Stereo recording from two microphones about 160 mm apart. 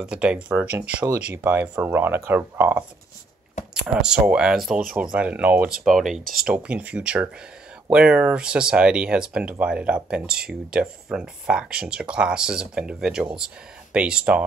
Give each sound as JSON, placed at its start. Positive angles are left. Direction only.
{"t": 0.0, "sound": "speech", "side_deg": -5}
{"t": 6.0, "sound": "speech", "side_deg": -50}
{"t": 6.4, "sound": "speech", "side_deg": -10}